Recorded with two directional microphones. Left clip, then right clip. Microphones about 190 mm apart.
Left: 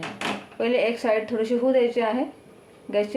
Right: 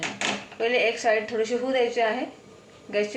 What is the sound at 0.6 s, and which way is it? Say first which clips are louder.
A woman's voice: left 1 dB; 65° left (ahead or behind).